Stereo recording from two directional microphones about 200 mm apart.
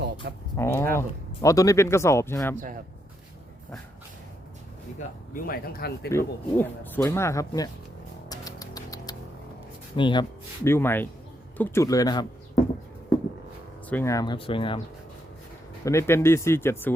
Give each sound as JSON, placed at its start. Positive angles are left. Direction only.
{"t": 0.5, "sound": "speech", "side_deg": 10}
{"t": 4.9, "sound": "speech", "side_deg": 45}
{"t": 6.1, "sound": "speech", "side_deg": 10}
{"t": 8.3, "sound": "music", "side_deg": 20}
{"t": 9.9, "sound": "speech", "side_deg": 25}
{"t": 10.6, "sound": "speech", "side_deg": 10}
{"t": 13.9, "sound": "speech", "side_deg": 15}
{"t": 15.8, "sound": "speech", "side_deg": 15}